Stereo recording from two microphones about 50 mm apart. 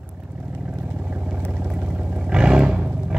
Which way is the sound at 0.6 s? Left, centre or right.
Centre.